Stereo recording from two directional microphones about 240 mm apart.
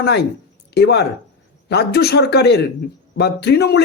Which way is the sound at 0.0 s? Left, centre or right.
Left.